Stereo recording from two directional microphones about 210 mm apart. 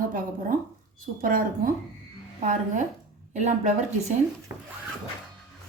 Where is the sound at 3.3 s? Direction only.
35° right (ahead or behind).